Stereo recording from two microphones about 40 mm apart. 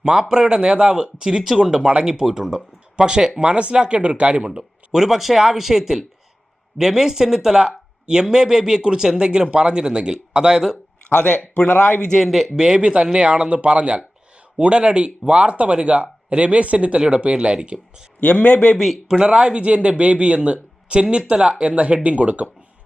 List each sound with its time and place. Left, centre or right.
0.0 s speech: centre
4.9 s speech: centre
11.1 s speech: left
11.3 s speech: left
12.2 s speech: centre
12.5 s speech: centre
12.8 s speech: right
18.2 s speech: left
19.0 s speech: centre; by 22.4 s right